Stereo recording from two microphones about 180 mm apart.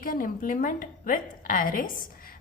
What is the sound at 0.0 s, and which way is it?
A woman's voice, 50° left (ahead or behind).